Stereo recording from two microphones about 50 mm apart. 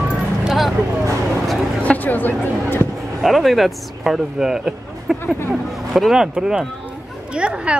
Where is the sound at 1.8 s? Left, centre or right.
Left.